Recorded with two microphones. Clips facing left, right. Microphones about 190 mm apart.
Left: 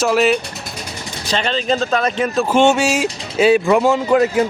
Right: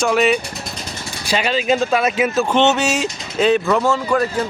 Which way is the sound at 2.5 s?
10° left (ahead or behind).